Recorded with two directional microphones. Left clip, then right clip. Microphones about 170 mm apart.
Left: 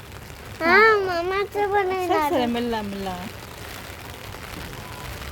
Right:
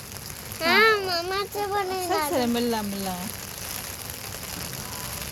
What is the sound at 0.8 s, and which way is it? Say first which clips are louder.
A child's voice: left 3 dB; 35° left (ahead or behind).